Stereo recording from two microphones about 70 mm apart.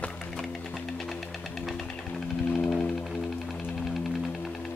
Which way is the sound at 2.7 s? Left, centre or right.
Centre.